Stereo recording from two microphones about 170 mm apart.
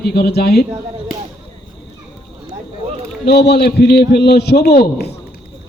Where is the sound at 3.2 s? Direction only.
75° left (ahead or behind).